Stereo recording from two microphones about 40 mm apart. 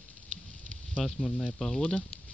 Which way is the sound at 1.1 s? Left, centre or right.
Left.